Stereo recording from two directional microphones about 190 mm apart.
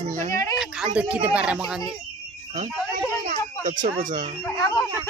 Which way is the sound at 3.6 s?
40° right (ahead or behind).